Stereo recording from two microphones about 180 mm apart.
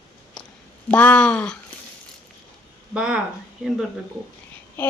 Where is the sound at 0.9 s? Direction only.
5° left (ahead or behind).